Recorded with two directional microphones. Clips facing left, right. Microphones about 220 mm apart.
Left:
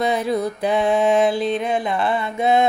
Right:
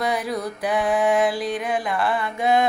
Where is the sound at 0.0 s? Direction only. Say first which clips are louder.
Left 4 dB; 25° left (ahead or behind).